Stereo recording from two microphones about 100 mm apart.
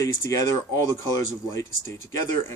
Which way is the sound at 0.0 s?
30° left (ahead or behind).